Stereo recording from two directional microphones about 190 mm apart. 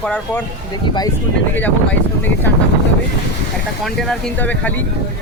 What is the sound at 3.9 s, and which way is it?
Speech, 5° left (ahead or behind).